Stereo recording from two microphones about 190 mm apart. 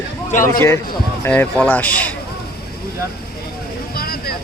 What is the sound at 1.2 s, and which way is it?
Speech, 10° left (ahead or behind).